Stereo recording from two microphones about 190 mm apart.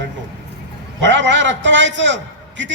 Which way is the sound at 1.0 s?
70° right (ahead or behind).